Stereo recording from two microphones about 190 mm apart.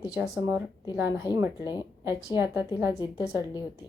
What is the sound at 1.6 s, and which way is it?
Speech, 20° left (ahead or behind).